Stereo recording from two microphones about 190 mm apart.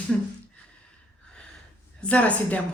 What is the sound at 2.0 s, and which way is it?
Speech, 5° left (ahead or behind).